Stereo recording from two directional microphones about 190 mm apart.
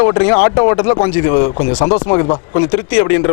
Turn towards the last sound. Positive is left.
turn(degrees=20)  # may be behind; listen again after turning